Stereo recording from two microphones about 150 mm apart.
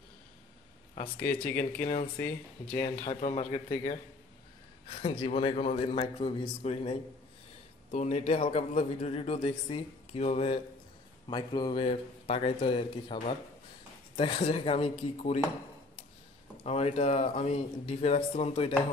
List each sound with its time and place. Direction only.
1.2 s speech: 15° left (ahead or behind)
2.8 s speech: 45° left (ahead or behind)
4.8 s speech: 35° left (ahead or behind)
11.2 s speech: 30° left (ahead or behind)
16.6 s speech: 45° left (ahead or behind)